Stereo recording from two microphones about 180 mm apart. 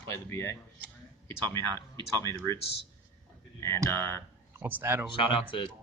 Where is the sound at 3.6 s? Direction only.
15° left (ahead or behind).